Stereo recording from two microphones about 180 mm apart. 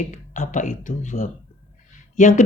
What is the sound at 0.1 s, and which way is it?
Speech, 45° left (ahead or behind).